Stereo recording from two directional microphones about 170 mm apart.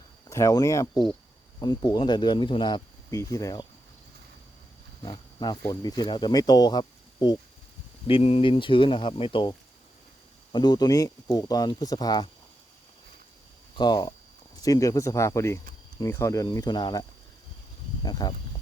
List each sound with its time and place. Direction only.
0.3 s speech: 20° left (ahead or behind)
5.0 s speech: 25° left (ahead or behind)
13.7 s speech: 25° left (ahead or behind)